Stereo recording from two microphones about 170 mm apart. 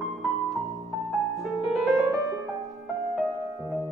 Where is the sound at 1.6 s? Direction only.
Centre (ahead or behind).